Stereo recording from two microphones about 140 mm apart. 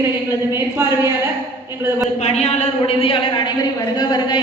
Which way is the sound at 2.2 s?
50° left (ahead or behind).